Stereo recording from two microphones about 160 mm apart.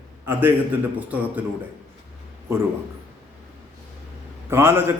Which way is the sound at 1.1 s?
10° right (ahead or behind).